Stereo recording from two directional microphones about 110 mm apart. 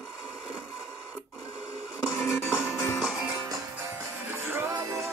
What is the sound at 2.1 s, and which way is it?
Music, 25° left (ahead or behind).